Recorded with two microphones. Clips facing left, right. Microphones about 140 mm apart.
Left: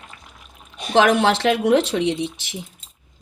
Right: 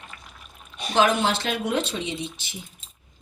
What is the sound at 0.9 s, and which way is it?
Speech, 85° left.